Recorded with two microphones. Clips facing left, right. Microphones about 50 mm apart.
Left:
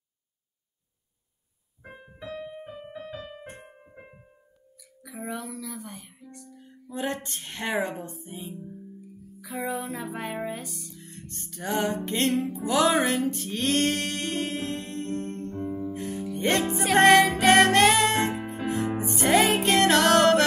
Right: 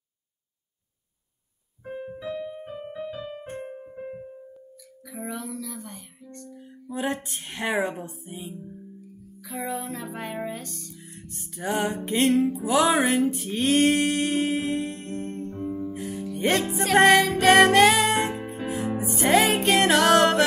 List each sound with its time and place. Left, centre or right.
2.3 s keyboard: centre
2.6 s keyboard: centre
5.0 s music: centre
5.4 s speech: centre
6.5 s music: centre
7.2 s speech: centre
9.4 s music: centre
10.0 s speech: centre
11.0 s music: centre
12.6 s a sound: centre
15.9 s music: right
16.3 s music: centre